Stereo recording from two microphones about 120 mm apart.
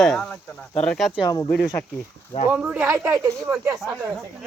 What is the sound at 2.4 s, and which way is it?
Speech, 15° right (ahead or behind).